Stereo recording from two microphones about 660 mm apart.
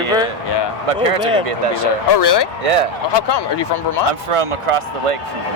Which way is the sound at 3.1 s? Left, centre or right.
Left.